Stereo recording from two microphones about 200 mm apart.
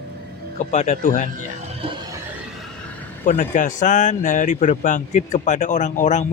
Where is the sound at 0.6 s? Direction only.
35° left (ahead or behind).